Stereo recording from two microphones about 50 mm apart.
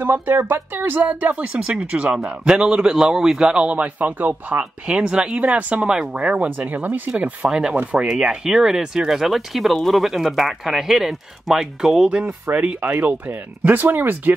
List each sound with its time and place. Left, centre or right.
0.0 s speech: right
1.2 s a man's voice: right
3.7 s speech: right
4.8 s speech: centre; by 7.0 s right
7.1 s speech: right
8.3 s a man's voice: centre
12.1 s speech: right